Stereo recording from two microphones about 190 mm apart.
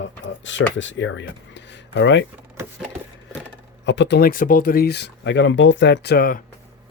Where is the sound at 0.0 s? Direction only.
80° left.